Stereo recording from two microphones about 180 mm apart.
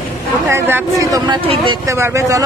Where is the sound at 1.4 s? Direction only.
30° right (ahead or behind).